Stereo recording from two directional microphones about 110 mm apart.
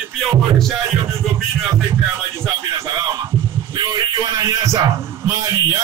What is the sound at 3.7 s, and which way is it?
Music, 40° right (ahead or behind).